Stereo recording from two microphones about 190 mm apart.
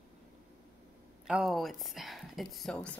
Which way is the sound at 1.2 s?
Centre (ahead or behind).